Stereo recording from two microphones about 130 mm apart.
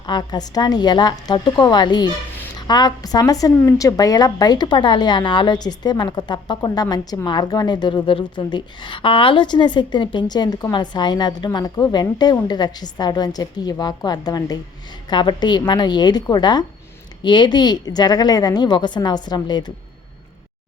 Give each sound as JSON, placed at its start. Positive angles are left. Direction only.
{"t": 0.0, "sound": "a woman's voice", "side_deg": 35}